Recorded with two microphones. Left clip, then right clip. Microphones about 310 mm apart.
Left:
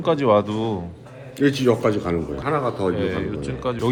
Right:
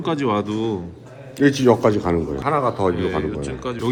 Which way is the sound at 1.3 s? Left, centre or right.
Right.